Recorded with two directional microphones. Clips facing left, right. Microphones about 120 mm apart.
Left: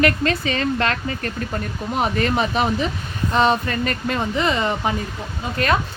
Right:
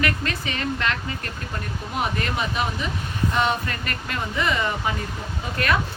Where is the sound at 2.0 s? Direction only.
35° left (ahead or behind).